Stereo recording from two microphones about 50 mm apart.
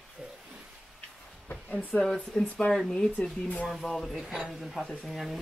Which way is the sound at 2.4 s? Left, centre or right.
Left.